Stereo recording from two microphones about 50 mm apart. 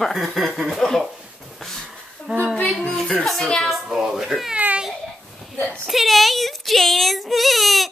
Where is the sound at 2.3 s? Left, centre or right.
Right.